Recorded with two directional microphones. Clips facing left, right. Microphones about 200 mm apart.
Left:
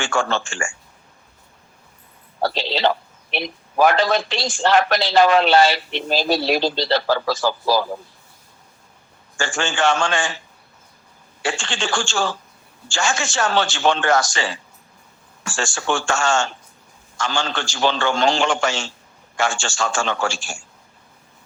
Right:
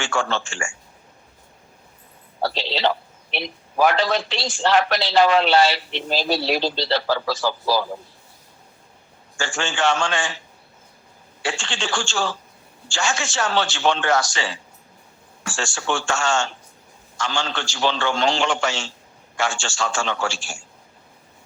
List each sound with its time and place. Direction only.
0.0 s a man's voice: 50° left (ahead or behind)
2.4 s a man's voice: 45° left (ahead or behind)
9.4 s a man's voice: 50° left (ahead or behind)
11.4 s a man's voice: 50° left (ahead or behind)